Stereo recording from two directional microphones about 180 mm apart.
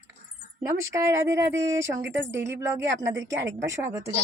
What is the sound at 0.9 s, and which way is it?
Speech, 15° right (ahead or behind).